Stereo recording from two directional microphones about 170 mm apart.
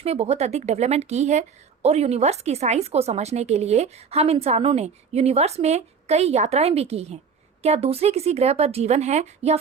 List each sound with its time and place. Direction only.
0.0 s speech: 40° right (ahead or behind)